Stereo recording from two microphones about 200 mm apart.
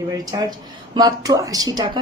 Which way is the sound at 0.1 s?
20° right (ahead or behind).